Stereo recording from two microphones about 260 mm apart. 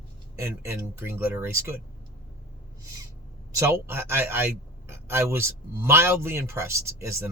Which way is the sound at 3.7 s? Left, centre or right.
Centre.